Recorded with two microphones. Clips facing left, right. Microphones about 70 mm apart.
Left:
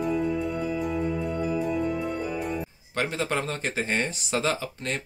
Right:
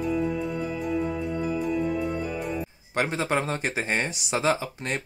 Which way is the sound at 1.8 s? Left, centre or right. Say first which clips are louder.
Right 1 dB; centre.